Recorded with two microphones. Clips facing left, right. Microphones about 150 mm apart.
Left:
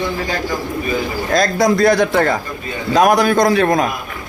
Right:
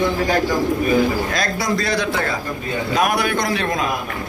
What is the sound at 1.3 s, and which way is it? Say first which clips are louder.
Speech: left 7 dB; 45° left (ahead or behind).